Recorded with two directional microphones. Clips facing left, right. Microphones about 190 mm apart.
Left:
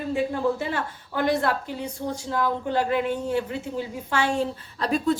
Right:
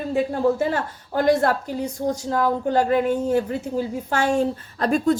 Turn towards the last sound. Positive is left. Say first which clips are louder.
# right 4 dB
turn(degrees=-45)  # may be behind; listen again after turning